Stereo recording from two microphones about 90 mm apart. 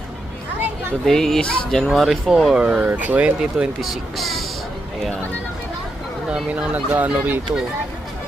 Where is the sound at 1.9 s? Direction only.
5° right (ahead or behind).